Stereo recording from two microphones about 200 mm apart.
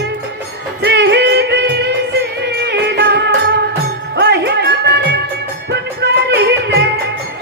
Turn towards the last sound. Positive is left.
turn(degrees=-55)  # may be behind; listen again after turning